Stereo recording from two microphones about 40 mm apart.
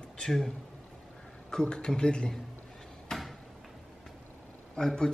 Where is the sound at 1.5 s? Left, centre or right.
Left.